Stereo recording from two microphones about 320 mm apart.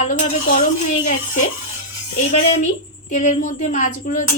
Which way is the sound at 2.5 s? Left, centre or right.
Left.